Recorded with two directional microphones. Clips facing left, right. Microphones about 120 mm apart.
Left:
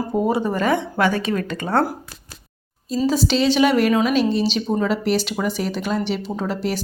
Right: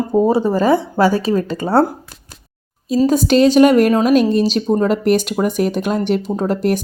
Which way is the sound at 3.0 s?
50° right (ahead or behind).